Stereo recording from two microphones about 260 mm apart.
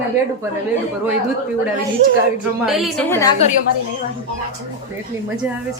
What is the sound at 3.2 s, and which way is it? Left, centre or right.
Speech, centre.